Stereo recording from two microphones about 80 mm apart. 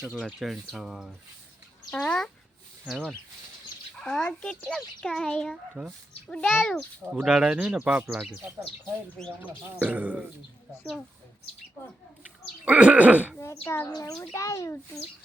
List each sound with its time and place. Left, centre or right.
0.0 s speech: centre
1.9 s a child's voice: centre
3.9 s a child's voice: centre
5.8 s speech: centre
6.4 s a child's voice: centre
7.1 s speech: centre
8.1 s speech: centre
9.2 s speech: centre
9.7 s speech: centre
12.6 s speech: centre
13.4 s speech: left
13.9 s a child's voice: left